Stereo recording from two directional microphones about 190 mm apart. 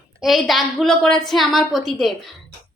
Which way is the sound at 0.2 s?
Centre (ahead or behind).